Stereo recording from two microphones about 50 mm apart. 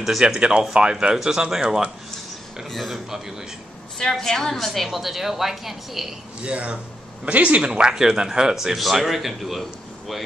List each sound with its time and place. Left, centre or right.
0.0 s speech: centre
0.4 s speech: centre
2.7 s a woman's voice: centre
4.0 s a woman's voice: centre
6.4 s speech: right; by 10.2 s centre